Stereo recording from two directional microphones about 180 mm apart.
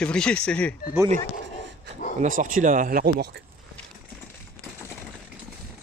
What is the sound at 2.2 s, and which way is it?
Speech, 45° right (ahead or behind).